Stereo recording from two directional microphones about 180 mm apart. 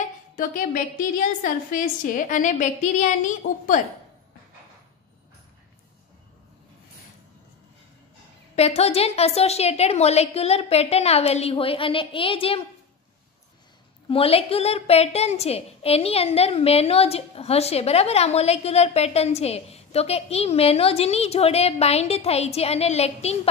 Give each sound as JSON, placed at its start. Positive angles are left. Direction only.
{"t": 0.0, "sound": "a sound", "side_deg": 45}
{"t": 1.4, "sound": "a woman's voice", "side_deg": 45}
{"t": 8.5, "sound": "a woman's voice", "side_deg": 35}
{"t": 14.0, "sound": "a woman's voice", "side_deg": 30}